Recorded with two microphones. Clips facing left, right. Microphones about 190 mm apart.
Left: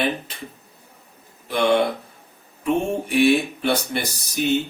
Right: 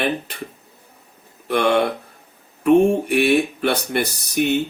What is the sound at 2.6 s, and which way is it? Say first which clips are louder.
Speech: right 8 dB; 60° right (ahead or behind).